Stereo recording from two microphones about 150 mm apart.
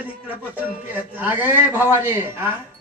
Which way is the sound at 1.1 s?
10° right (ahead or behind).